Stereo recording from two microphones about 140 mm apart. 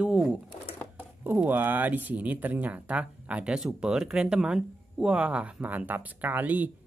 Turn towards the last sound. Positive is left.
turn(degrees=-10)  # may be behind; listen again after turning